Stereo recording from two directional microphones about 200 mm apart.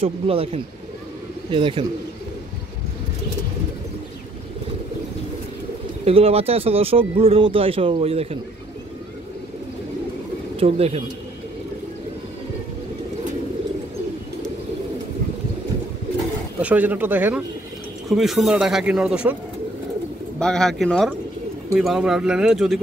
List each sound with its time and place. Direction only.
0.0 s speech: 30° right (ahead or behind)
6.0 s speech: 30° right (ahead or behind)
10.6 s speech: 30° right (ahead or behind)
16.6 s speech: 10° right (ahead or behind)
20.3 s speech: 5° left (ahead or behind)